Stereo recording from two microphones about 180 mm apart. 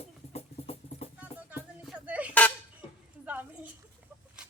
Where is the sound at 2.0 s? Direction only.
10° right (ahead or behind).